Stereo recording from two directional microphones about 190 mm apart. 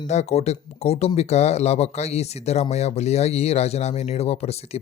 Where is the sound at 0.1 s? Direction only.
35° left (ahead or behind).